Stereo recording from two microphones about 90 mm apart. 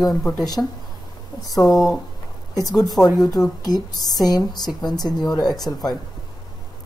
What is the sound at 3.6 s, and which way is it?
Speech, 45° left (ahead or behind).